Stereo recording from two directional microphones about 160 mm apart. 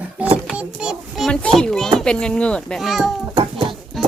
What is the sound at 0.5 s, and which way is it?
A child's voice, 5° right (ahead or behind).